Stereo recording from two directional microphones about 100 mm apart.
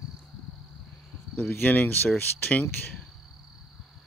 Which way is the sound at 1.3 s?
15° left (ahead or behind).